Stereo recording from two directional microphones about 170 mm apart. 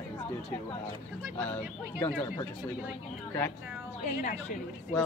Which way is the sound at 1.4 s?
10° left (ahead or behind).